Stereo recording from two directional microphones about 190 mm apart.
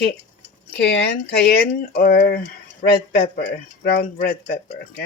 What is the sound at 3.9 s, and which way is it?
Speech, 50° left (ahead or behind).